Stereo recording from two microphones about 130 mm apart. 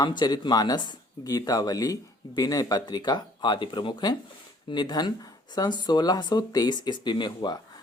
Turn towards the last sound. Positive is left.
turn(degrees=35)  # may be behind; listen again after turning